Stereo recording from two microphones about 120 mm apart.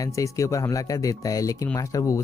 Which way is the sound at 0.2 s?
25° left (ahead or behind).